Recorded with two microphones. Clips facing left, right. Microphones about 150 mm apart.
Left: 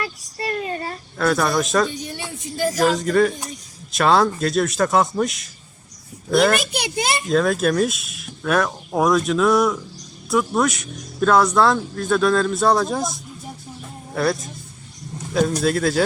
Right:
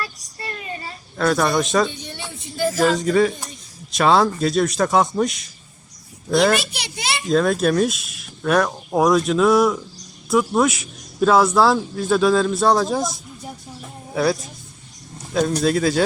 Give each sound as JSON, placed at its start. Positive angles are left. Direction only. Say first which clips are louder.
{"t": 1.1, "sound": "a man's voice", "louder": "right 1 dB", "side_deg": 0}
{"t": 1.9, "sound": "speech", "louder": "left 3 dB", "side_deg": 10}
{"t": 2.7, "sound": "a man's voice", "louder": "even", "side_deg": 0}
{"t": 6.7, "sound": "a child's voice", "louder": "left 5 dB", "side_deg": 50}
{"t": 7.3, "sound": "a man's voice", "louder": "right 2 dB", "side_deg": 0}